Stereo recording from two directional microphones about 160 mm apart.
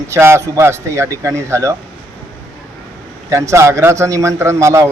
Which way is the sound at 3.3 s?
20° right (ahead or behind).